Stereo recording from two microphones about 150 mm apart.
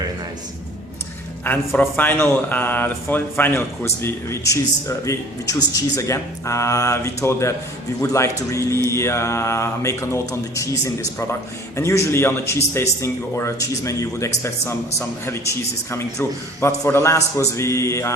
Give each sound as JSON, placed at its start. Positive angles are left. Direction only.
{"t": 1.5, "sound": "a man's voice", "side_deg": 10}